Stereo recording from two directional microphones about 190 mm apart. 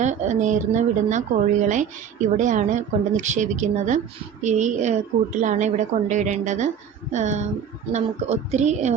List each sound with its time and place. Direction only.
0.0 s speech: 40° right (ahead or behind)